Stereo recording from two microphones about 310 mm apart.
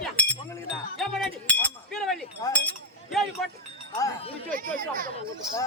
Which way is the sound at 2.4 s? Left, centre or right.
Centre.